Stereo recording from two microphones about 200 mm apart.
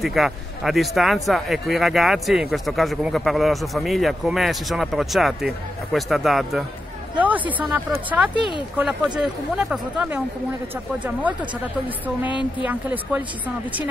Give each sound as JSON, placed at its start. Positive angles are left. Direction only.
{"t": 0.0, "sound": "speech", "side_deg": 0}
{"t": 8.4, "sound": "a woman's voice", "side_deg": 25}
{"t": 8.7, "sound": "speech", "side_deg": -5}
{"t": 12.3, "sound": "a woman's voice", "side_deg": 25}
{"t": 12.6, "sound": "speech", "side_deg": -10}